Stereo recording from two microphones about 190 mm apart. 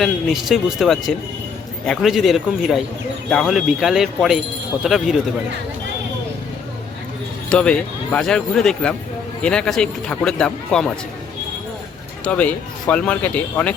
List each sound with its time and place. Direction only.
0.0 s speech: centre (ahead or behind)
7.5 s speech: 5° left (ahead or behind)
12.2 s speech: 10° left (ahead or behind)